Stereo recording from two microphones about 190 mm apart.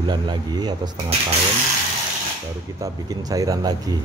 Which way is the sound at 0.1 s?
20° right (ahead or behind).